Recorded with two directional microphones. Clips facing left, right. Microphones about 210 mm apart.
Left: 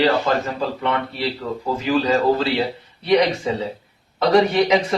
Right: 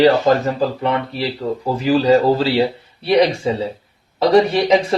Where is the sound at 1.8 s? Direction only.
35° right (ahead or behind).